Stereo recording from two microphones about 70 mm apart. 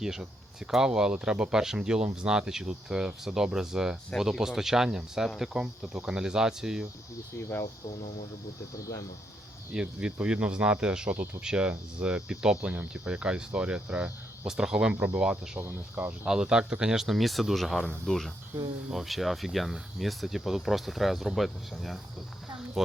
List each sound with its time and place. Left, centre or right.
0.0 s speech: centre
8.7 s speech: left
9.7 s speech: centre
15.5 s speech: right
16.0 s speech: right; by 22.0 s centre